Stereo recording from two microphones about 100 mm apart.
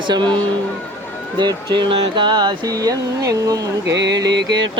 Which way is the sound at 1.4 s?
50° right (ahead or behind).